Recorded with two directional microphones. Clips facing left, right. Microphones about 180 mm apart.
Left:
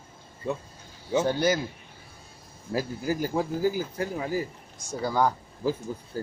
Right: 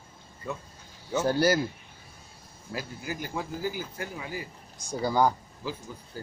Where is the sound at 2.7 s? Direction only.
35° left (ahead or behind).